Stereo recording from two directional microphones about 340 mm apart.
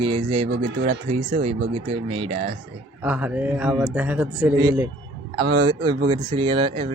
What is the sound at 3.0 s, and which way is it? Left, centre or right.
A man's voice, centre.